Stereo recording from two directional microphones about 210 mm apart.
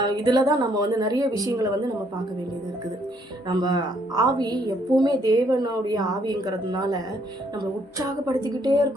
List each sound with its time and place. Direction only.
0.0 s a woman's voice: 20° right (ahead or behind)
3.6 s a woman's voice: 20° right (ahead or behind)